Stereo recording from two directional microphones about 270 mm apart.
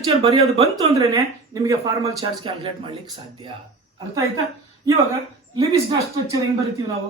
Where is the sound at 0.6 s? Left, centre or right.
Centre.